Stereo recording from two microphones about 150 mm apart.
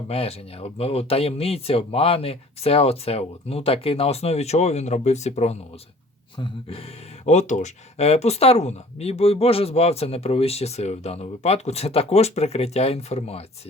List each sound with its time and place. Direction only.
0.1 s speech: 40° left (ahead or behind)
6.3 s speech: 35° left (ahead or behind)